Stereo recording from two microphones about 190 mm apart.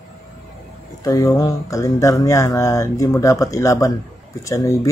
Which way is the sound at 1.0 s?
20° left (ahead or behind).